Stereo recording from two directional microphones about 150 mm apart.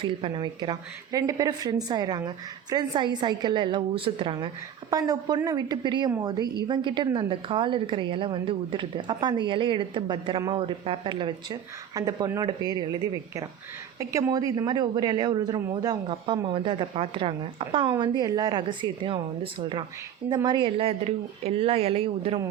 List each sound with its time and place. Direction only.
0.0 s a woman's voice: 35° right (ahead or behind)